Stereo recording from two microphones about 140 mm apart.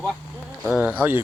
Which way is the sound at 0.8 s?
15° right (ahead or behind).